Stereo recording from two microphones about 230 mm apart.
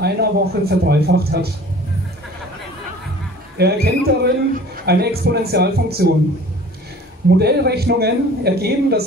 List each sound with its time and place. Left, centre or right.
0.0 s a man's voice: right
3.5 s a man's voice: right
7.2 s a man's voice: right